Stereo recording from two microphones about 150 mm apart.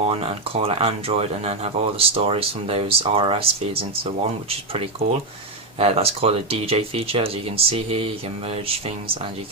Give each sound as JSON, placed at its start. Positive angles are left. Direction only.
{"t": 0.0, "sound": "speech", "side_deg": -40}